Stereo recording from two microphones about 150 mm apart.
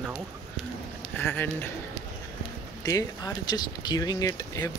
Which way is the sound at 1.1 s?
10° left (ahead or behind).